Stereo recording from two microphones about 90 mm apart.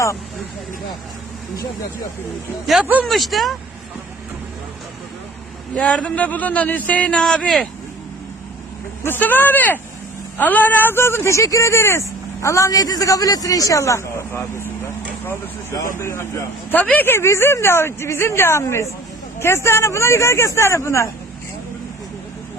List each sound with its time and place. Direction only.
3.1 s speech: centre (ahead or behind)
5.7 s a man's voice: 15° left (ahead or behind)
9.0 s speech: 20° left (ahead or behind)
15.7 s speech: 30° left (ahead or behind)
16.7 s speech: 20° left (ahead or behind); by 21.1 s 35° left (ahead or behind)